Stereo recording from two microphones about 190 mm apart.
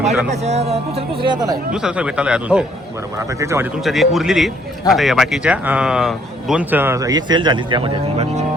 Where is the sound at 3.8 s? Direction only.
Centre (ahead or behind).